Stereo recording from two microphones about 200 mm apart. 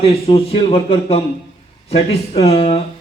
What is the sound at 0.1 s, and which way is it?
A man's voice, 30° left (ahead or behind).